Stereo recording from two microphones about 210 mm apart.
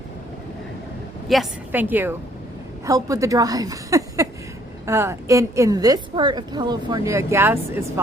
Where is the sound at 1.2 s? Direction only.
5° right (ahead or behind).